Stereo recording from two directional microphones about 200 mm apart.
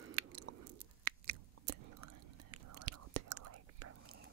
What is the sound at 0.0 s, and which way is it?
Biting, 90° right.